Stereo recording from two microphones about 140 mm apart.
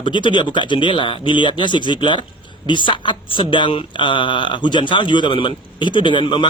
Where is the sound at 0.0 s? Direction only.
35° left (ahead or behind).